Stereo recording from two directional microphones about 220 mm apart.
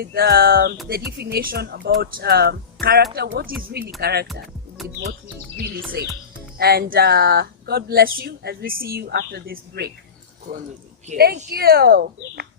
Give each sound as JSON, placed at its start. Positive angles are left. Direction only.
{"t": 0.0, "sound": "speech", "side_deg": -45}
{"t": 4.8, "sound": "speech", "side_deg": 0}
{"t": 5.5, "sound": "speech", "side_deg": -45}
{"t": 11.1, "sound": "speech", "side_deg": -40}